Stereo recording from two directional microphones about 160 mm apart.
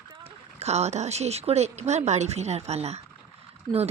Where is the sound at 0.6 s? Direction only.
45° right (ahead or behind).